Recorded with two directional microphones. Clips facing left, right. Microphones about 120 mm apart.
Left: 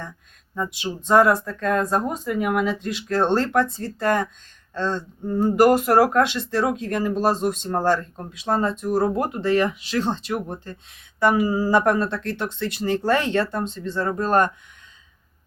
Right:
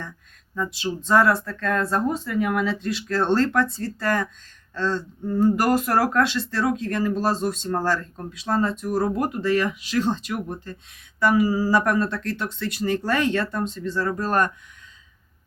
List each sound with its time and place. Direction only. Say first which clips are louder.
0.5 s speech: even; 20° left (ahead or behind)